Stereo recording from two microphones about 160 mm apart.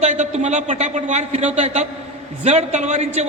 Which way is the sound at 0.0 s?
45° right (ahead or behind).